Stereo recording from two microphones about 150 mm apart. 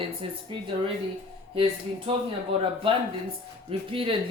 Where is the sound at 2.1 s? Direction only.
40° right (ahead or behind).